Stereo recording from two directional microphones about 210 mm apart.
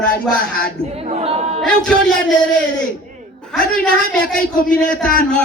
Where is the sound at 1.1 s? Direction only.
30° right (ahead or behind).